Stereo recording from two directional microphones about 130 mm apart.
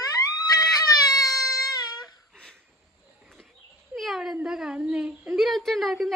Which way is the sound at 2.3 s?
5° left (ahead or behind).